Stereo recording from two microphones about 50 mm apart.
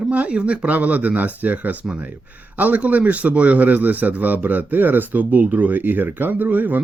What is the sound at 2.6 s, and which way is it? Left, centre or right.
A man's voice, right.